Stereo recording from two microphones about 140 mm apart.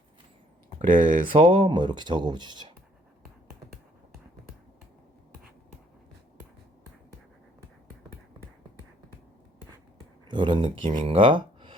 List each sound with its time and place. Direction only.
0.8 s speech: 70° right (ahead or behind)
1.3 s speech: 40° right (ahead or behind)
10.2 s speech: 35° right (ahead or behind)